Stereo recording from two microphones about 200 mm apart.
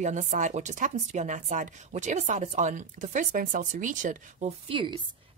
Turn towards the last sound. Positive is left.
turn(degrees=-25)  # may be behind; listen again after turning